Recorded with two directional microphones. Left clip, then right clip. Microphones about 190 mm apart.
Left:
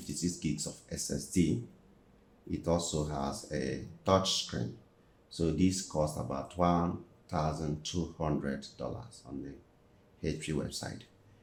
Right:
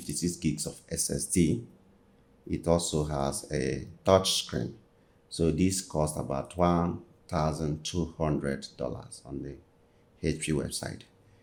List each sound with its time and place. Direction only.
0.1 s speech: 55° right (ahead or behind)
2.5 s speech: 60° right (ahead or behind)